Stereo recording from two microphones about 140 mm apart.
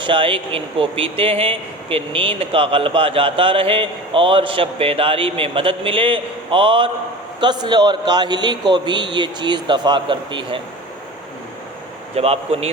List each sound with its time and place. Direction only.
0.0 s speech: 40° right (ahead or behind)
12.1 s a man's voice: 45° right (ahead or behind)